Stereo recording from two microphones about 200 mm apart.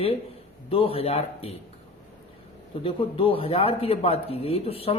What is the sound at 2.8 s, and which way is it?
Speech, 30° left (ahead or behind).